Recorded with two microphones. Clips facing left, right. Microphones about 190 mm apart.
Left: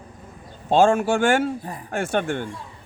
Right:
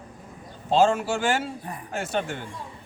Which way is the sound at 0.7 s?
50° left (ahead or behind).